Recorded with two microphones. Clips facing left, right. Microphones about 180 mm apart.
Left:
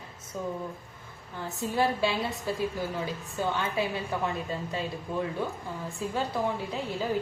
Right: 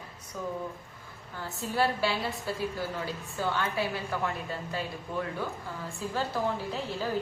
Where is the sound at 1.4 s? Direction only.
20° left (ahead or behind).